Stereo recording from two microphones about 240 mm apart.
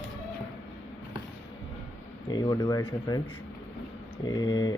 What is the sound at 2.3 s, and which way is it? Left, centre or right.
Speech, centre.